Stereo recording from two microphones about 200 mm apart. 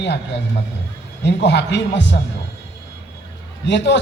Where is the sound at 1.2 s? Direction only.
60° left (ahead or behind).